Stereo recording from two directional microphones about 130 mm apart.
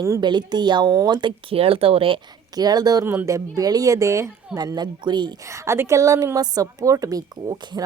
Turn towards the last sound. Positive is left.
turn(degrees=-30)  # may be behind; listen again after turning